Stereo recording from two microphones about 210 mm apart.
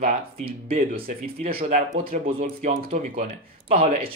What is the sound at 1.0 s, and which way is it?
Speech, 45° right (ahead or behind).